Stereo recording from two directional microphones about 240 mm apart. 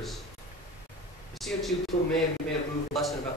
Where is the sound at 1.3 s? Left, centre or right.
Centre.